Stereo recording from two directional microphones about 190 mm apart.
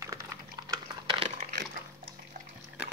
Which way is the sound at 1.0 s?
35° right (ahead or behind).